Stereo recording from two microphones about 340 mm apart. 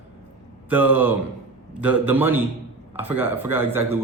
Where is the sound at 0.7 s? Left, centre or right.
Centre.